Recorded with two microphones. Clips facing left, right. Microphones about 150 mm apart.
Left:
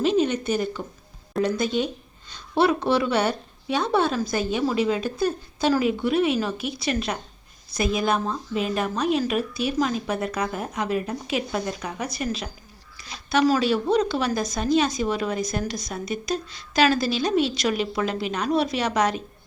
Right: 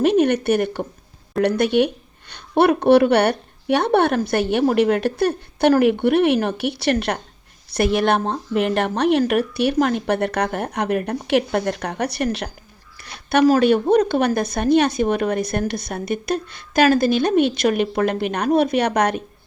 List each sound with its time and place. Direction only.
0.0 s a woman's voice: 65° right (ahead or behind)